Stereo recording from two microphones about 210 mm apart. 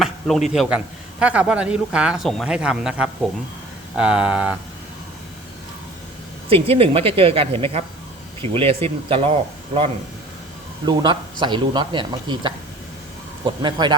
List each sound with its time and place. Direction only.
0.0 s a man's voice: centre (ahead or behind)
6.5 s speech: 25° right (ahead or behind)
10.8 s speech: 20° right (ahead or behind)